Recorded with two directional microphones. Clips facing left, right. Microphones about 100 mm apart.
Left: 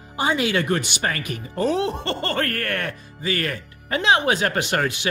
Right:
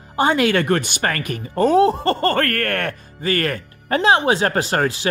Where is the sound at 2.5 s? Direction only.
55° right (ahead or behind).